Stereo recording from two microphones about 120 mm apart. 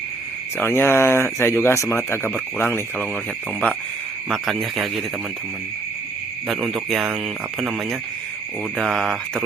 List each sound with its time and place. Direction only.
0.5 s speech: 20° left (ahead or behind)
4.3 s speech: centre (ahead or behind)
6.5 s speech: centre (ahead or behind)